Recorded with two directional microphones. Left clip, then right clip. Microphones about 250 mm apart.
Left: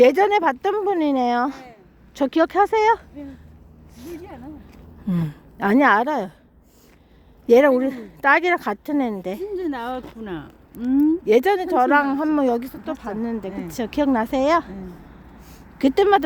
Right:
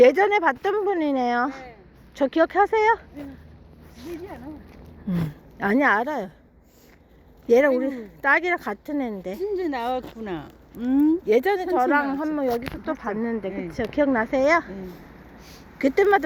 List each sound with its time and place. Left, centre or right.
0.0 s speech: left
7.4 s speech: left
10.2 s speech: left
11.3 s speech: left
12.8 s speech: centre
13.6 s a woman's voice: left
15.8 s a woman's voice: left